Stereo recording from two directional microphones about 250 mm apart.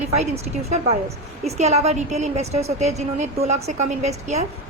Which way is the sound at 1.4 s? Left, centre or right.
Right.